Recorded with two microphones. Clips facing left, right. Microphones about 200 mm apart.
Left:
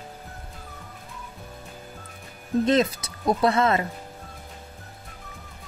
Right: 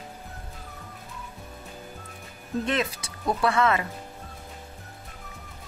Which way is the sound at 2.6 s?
40° left (ahead or behind).